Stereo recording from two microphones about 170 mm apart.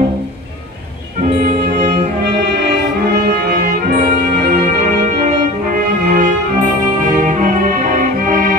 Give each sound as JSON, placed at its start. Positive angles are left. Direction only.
{"t": 3.2, "sound": "brass instrument", "side_deg": -60}
{"t": 6.0, "sound": "music", "side_deg": -50}